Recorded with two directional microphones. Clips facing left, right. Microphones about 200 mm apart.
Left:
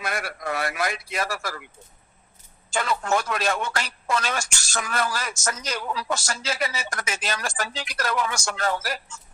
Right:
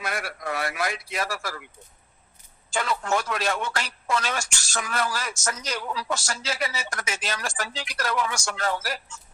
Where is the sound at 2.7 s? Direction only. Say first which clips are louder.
Left 1 dB; 50° left (ahead or behind).